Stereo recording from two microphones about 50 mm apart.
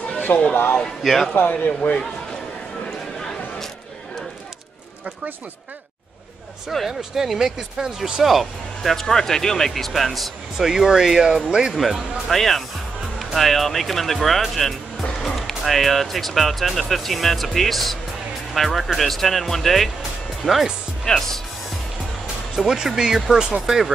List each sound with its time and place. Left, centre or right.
0.3 s a man's voice: left
0.7 s speech: centre
1.5 s a man's voice: left
6.9 s speech: centre
11.7 s speech: centre
20.0 s music: centre
21.0 s speech: centre
22.6 s speech: centre